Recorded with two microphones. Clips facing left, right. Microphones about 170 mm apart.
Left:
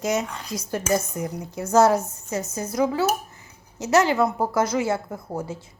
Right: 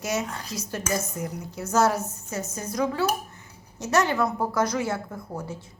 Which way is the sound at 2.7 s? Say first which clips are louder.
Left 3 dB; 25° left (ahead or behind).